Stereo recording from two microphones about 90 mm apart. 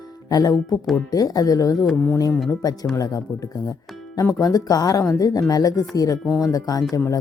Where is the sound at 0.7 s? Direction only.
Centre (ahead or behind).